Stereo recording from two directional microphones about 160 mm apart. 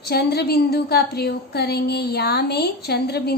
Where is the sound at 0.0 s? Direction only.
90° left.